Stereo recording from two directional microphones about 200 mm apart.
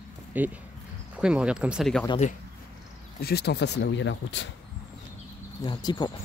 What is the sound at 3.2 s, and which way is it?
Speech, 55° left (ahead or behind).